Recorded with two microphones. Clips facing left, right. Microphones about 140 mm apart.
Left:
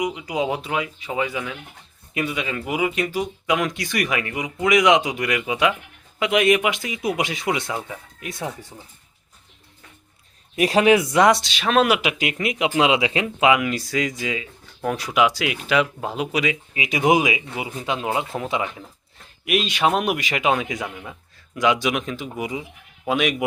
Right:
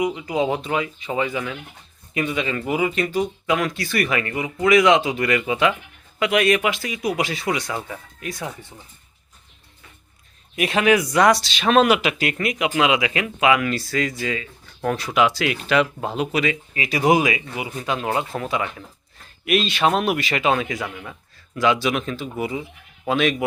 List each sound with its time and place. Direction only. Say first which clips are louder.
0.0 s speech: right 2 dB; 10° left (ahead or behind)
10.5 s speech: left 2 dB; 30° left (ahead or behind)
11.5 s speech: right 2 dB; centre (ahead or behind)
12.0 s speech: right 1 dB; 15° left (ahead or behind)